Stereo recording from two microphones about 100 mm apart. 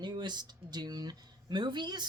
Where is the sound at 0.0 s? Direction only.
50° right (ahead or behind).